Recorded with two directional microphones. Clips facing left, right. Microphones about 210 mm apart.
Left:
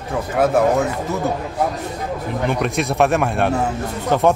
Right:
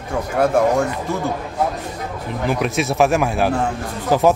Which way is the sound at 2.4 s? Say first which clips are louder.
Right 1 dB; centre (ahead or behind).